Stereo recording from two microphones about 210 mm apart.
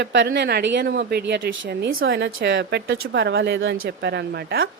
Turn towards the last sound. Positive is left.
turn(degrees=-50)  # may be behind; listen again after turning